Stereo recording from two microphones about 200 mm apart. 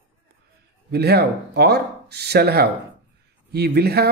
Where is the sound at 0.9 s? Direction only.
55° right (ahead or behind).